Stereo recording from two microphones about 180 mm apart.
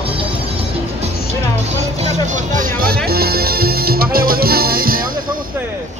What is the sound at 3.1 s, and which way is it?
Music, 60° right (ahead or behind).